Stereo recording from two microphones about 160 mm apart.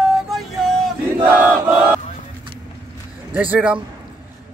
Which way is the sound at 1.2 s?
10° right (ahead or behind).